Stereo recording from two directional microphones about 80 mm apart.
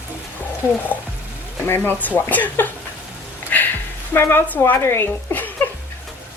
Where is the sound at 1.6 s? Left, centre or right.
Left.